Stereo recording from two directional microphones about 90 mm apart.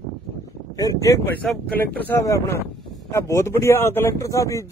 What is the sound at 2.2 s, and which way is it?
Speech, 35° left (ahead or behind).